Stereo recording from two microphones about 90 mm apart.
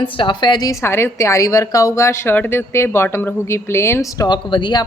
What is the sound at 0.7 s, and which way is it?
A woman's voice, 30° left (ahead or behind).